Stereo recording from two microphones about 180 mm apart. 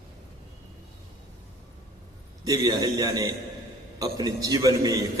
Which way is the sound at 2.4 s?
20° right (ahead or behind).